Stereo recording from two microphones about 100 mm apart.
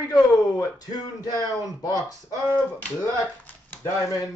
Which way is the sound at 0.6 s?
40° left (ahead or behind).